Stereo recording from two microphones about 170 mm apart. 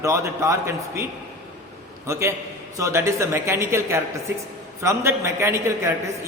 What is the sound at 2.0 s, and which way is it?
A man's voice, 15° right (ahead or behind).